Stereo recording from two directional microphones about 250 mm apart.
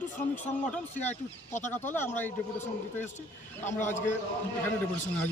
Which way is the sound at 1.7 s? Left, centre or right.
Centre.